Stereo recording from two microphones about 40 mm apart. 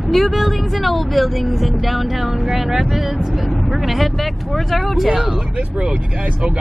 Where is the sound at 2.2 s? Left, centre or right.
Centre.